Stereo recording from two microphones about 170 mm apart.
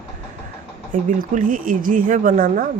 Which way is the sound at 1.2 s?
55° right (ahead or behind).